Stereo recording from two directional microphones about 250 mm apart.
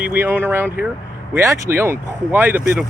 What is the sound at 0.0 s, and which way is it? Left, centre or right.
Speech, centre.